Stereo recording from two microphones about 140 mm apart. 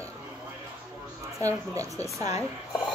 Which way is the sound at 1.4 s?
25° right (ahead or behind).